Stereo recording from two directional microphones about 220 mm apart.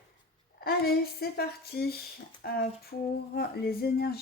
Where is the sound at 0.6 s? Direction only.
45° left (ahead or behind).